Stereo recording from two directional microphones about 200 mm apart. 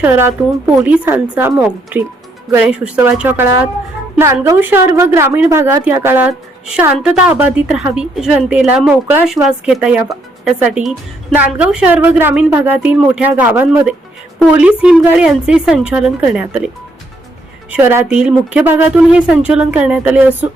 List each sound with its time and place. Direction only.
0.0 s a woman's voice: 10° right (ahead or behind)
17.7 s a woman's voice: 10° right (ahead or behind)